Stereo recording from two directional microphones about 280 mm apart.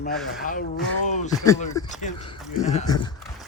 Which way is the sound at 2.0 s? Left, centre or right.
Centre.